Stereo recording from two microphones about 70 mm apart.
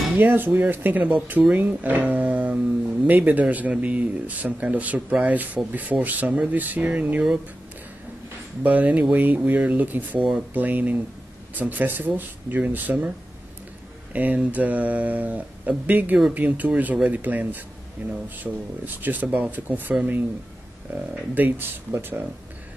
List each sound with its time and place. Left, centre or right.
0.2 s speech: right
8.6 s speech: right
14.1 s speech: right